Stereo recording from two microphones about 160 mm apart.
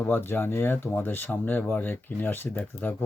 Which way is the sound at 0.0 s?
15° left (ahead or behind).